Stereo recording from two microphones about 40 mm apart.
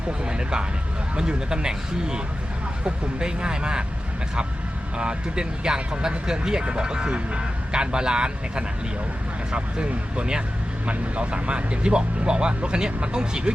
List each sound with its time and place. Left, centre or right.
0.3 s speech: right
4.9 s speech: right